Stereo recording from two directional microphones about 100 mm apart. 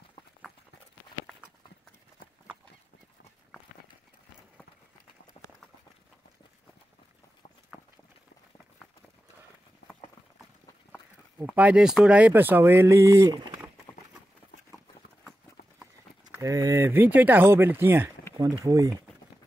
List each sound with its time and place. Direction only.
5.4 s clip-clop: 70° left (ahead or behind)
11.5 s speech: 10° right (ahead or behind); by 13.4 s 30° right (ahead or behind)
13.9 s a sound: 25° left (ahead or behind)
16.3 s speech: 35° right (ahead or behind)
18.4 s speech: 35° right (ahead or behind)